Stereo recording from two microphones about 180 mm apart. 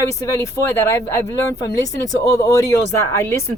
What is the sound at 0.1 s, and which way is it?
Speech, 15° left (ahead or behind).